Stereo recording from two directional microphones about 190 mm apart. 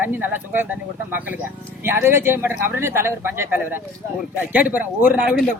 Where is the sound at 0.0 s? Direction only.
10° right (ahead or behind).